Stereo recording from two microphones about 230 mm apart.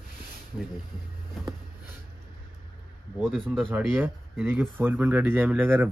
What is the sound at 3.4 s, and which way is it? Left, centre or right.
Speech, centre.